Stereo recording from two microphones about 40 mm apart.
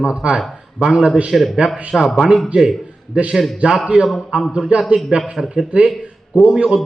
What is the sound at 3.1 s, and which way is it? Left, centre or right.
Speech, right.